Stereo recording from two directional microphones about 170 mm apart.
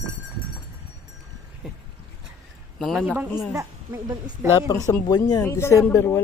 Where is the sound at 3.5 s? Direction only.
20° right (ahead or behind).